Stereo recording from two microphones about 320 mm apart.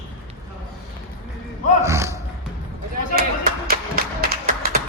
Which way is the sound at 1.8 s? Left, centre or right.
Centre.